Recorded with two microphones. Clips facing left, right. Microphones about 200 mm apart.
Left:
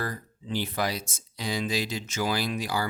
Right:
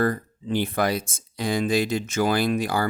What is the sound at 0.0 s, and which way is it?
Speech, 55° right (ahead or behind).